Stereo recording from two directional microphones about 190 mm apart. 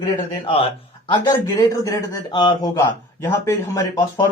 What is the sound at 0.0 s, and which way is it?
A man's voice, 30° left (ahead or behind).